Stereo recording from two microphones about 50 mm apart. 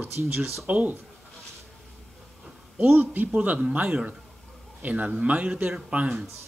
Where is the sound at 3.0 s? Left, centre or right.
Right.